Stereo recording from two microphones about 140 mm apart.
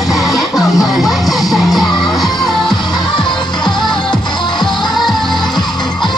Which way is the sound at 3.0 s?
35° left (ahead or behind).